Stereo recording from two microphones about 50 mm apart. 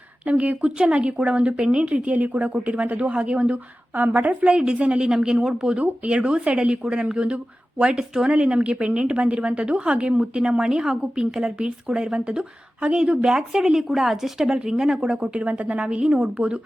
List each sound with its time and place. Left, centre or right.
0.3 s a woman's voice: right
3.9 s a woman's voice: right
4.5 s a woman's voice: centre